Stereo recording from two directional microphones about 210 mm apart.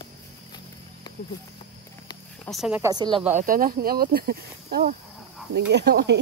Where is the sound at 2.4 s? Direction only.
Centre (ahead or behind).